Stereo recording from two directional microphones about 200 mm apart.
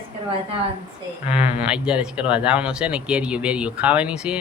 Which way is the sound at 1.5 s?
5° right (ahead or behind).